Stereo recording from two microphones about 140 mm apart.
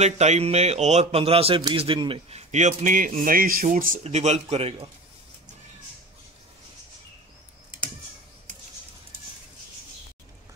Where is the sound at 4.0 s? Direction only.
50° right (ahead or behind).